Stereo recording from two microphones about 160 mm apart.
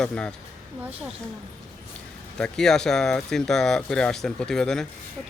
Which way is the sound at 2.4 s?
5° left (ahead or behind).